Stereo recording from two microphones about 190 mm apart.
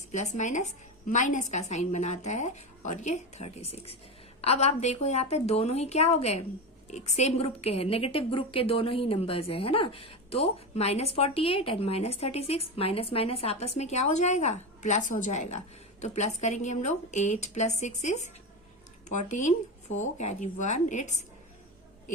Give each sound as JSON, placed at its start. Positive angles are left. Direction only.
{"t": 0.1, "sound": "a woman's voice", "side_deg": 40}